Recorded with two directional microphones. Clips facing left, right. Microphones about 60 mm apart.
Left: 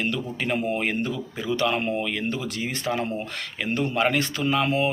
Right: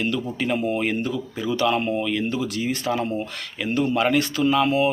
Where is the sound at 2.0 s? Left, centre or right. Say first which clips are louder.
Right 4 dB; left.